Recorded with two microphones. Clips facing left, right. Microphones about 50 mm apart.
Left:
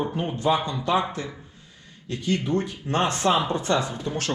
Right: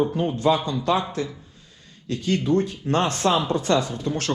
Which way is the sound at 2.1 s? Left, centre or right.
Right.